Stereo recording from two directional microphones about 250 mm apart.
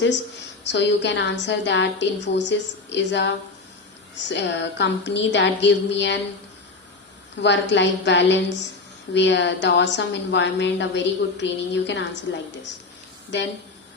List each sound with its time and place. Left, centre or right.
0.6 s a woman's voice: left
7.4 s a woman's voice: left